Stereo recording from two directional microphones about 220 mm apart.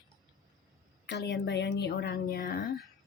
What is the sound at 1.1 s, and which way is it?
A woman's voice, 50° left (ahead or behind).